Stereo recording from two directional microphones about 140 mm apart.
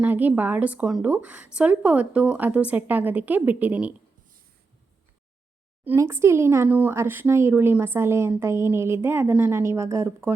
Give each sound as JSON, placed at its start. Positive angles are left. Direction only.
{"t": 0.0, "sound": "speech", "side_deg": -10}
{"t": 5.8, "sound": "speech", "side_deg": -15}